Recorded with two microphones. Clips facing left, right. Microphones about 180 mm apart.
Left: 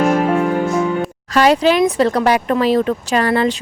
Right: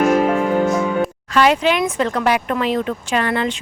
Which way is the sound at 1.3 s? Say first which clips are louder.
Left 4 dB; 40° left (ahead or behind).